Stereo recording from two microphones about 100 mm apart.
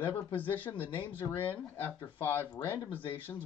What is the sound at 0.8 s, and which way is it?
Speech, 60° left (ahead or behind).